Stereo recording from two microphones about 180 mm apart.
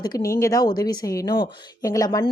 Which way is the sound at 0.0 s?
20° left (ahead or behind).